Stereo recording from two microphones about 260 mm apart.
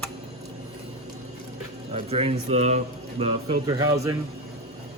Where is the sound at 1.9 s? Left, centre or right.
Right.